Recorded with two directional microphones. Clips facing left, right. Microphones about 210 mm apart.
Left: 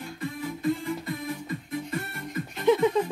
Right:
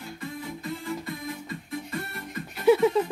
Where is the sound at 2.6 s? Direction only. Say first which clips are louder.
Right 2 dB; 5° right (ahead or behind).